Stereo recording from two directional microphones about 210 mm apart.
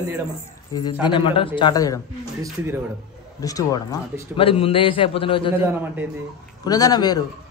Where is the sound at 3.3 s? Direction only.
15° left (ahead or behind).